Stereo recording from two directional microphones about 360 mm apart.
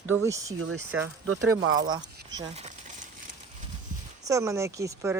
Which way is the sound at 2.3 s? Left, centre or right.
Centre.